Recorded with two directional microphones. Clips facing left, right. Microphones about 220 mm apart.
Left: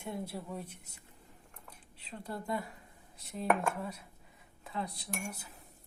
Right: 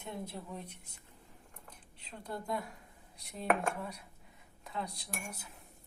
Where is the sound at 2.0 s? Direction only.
5° left (ahead or behind).